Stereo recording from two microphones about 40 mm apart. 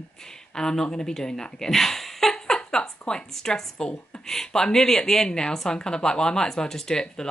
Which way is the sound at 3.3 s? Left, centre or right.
Centre.